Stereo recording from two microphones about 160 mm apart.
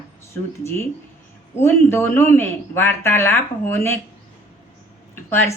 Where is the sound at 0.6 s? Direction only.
15° left (ahead or behind).